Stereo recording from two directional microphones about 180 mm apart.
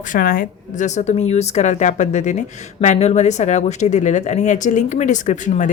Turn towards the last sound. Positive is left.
turn(degrees=45)  # may be behind; listen again after turning